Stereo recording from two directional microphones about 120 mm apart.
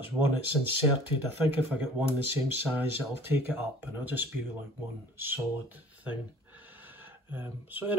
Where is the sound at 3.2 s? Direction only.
15° right (ahead or behind).